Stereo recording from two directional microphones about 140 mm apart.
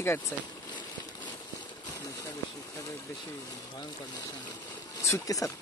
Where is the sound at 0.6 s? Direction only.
30° left (ahead or behind).